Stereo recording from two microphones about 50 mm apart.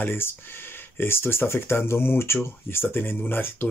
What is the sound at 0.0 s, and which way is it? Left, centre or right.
Speech, left.